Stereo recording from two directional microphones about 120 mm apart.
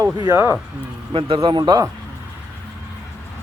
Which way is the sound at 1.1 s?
50° right (ahead or behind).